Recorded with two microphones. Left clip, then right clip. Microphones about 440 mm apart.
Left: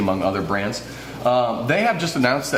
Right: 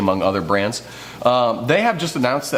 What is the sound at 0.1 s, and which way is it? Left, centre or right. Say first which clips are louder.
A man's voice: right 5 dB; right.